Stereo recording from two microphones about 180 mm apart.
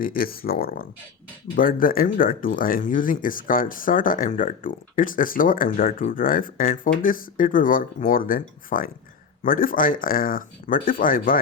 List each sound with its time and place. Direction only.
0.0 s speech: 55° left (ahead or behind)